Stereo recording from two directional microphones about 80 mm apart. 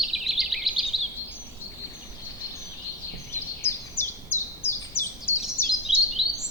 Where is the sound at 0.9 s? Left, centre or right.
Centre.